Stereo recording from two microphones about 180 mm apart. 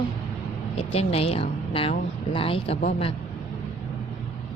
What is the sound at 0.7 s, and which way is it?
A woman's voice, 35° left (ahead or behind).